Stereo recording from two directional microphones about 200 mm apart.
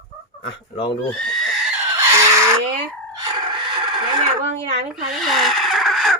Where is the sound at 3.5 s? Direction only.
25° right (ahead or behind).